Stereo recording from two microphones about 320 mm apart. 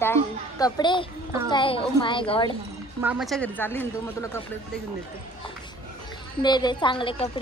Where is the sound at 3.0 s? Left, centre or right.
Centre.